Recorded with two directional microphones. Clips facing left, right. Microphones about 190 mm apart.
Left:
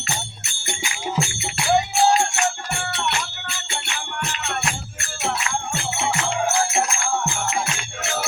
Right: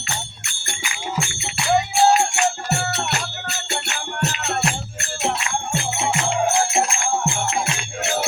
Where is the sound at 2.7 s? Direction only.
40° right (ahead or behind).